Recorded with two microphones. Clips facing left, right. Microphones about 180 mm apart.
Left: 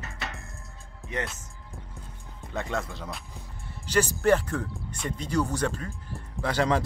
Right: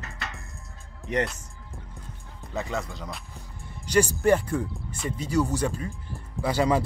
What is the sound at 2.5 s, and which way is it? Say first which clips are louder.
Speech: right 1 dB; centre (ahead or behind).